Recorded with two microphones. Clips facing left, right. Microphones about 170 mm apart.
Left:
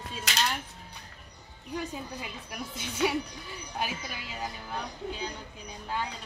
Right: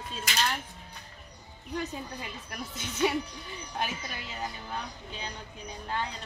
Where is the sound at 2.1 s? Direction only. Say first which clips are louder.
Left 1 dB; 5° left (ahead or behind).